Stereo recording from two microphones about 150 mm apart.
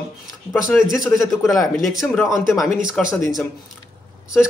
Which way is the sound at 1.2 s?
Centre (ahead or behind).